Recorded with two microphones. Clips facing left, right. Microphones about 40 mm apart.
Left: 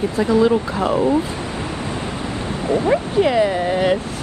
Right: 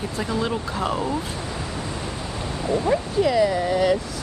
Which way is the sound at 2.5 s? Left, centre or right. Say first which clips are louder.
Left 4 dB; left.